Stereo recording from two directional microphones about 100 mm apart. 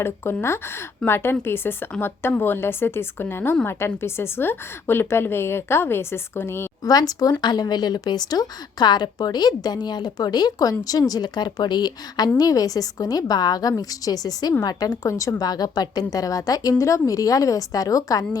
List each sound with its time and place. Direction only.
0.2 s speech: 25° left (ahead or behind)
6.8 s a woman's voice: 40° left (ahead or behind)